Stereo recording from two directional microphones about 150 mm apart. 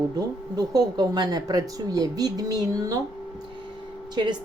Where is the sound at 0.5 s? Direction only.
25° right (ahead or behind).